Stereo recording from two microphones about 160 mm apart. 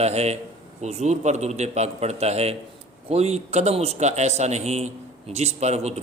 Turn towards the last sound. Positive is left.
turn(degrees=-45)  # may be behind; listen again after turning